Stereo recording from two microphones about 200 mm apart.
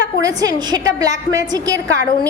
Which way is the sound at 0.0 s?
20° right (ahead or behind).